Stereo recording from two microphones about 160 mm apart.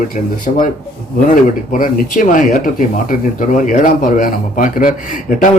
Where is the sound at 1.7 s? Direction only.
55° left (ahead or behind).